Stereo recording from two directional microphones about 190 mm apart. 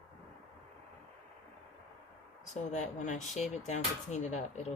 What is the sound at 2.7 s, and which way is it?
Speech, 40° left (ahead or behind).